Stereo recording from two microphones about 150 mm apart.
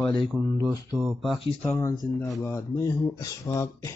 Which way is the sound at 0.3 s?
20° right (ahead or behind).